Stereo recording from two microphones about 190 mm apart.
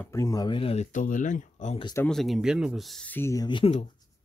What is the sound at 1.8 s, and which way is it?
Speech, 15° left (ahead or behind).